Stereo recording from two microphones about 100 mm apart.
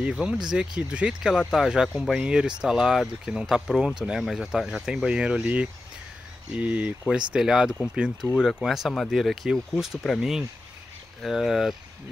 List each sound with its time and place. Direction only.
0.0 s speech: 10° right (ahead or behind)
11.2 s speech: 5° right (ahead or behind)